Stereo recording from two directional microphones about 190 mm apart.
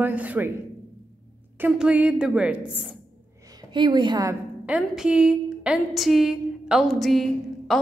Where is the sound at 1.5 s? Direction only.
5° right (ahead or behind).